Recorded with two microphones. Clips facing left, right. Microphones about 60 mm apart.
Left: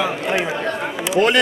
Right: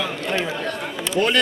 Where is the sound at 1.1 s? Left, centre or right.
Centre.